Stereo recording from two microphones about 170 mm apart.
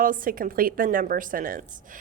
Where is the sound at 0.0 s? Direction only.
55° right (ahead or behind).